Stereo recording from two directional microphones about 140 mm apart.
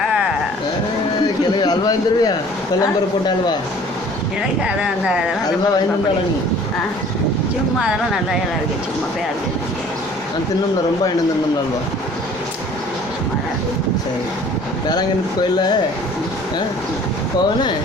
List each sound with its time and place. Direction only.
1.6 s speech: 30° left (ahead or behind)
4.6 s speech: 5° right (ahead or behind)
7.8 s speech: 5° right (ahead or behind)